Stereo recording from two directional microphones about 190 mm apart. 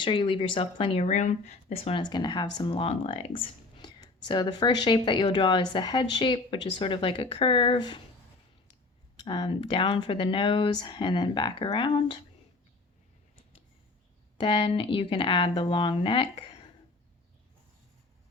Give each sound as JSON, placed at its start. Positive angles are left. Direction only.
{"t": 0.0, "sound": "speech", "side_deg": 25}
{"t": 9.2, "sound": "speech", "side_deg": 25}
{"t": 14.3, "sound": "speech", "side_deg": 25}